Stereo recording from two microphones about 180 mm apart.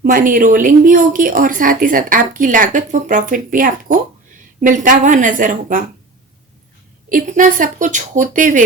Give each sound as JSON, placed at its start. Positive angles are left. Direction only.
{"t": 0.0, "sound": "speech", "side_deg": -50}
{"t": 7.1, "sound": "speech", "side_deg": -45}